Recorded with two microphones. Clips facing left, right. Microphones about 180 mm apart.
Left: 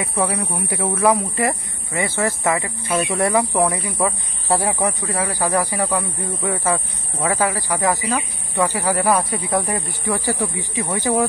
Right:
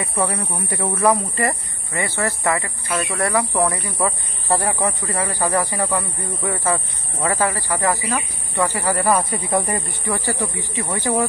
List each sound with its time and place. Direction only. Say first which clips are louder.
0.0 s speech: left 1 dB; centre (ahead or behind)
1.9 s speech: left 2 dB; 15° left (ahead or behind)
5.1 s speech: even; 5° left (ahead or behind)
5.9 s speech: left 1 dB; centre (ahead or behind)
6.6 s speech: left 1 dB; 10° left (ahead or behind)
8.9 s speech: even; centre (ahead or behind)
10.0 s speech: left 3 dB; 15° left (ahead or behind)